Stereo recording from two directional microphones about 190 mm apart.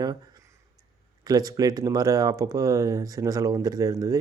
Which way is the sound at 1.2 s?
20° right (ahead or behind).